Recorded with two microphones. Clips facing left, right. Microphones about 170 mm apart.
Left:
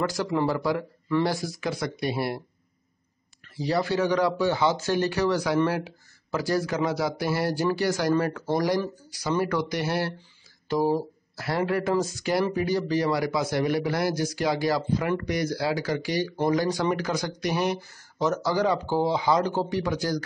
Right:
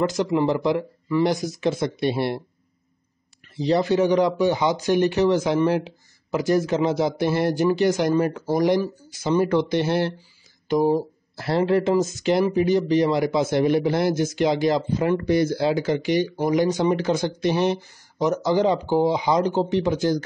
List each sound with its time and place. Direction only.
0.0 s speech: 20° right (ahead or behind)
3.5 s speech: 20° right (ahead or behind)